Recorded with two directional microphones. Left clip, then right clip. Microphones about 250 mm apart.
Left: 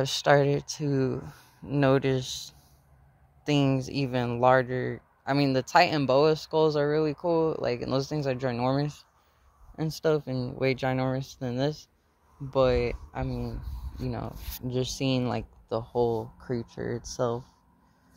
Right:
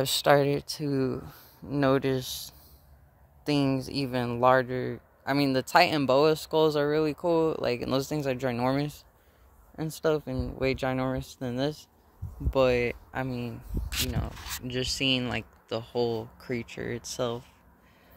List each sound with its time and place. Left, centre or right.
0.0 s speech: centre
14.0 s speech: centre
16.3 s speech: centre